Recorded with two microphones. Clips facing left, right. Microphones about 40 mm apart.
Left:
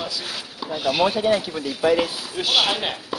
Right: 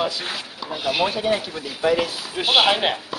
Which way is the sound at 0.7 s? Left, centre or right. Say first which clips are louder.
Left 2 dB; centre.